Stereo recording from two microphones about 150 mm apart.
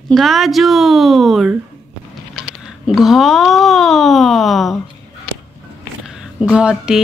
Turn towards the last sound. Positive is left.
turn(degrees=-5)  # may be behind; listen again after turning